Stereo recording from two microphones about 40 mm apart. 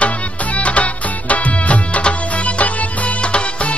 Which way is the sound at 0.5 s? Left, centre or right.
Left.